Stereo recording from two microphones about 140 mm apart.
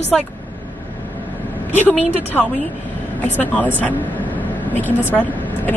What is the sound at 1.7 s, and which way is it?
A woman's voice, 15° left (ahead or behind).